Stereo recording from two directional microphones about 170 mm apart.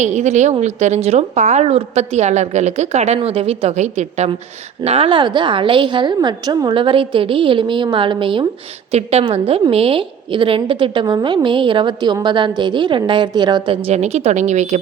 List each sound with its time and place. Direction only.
0.0 s a woman's voice: 45° right (ahead or behind)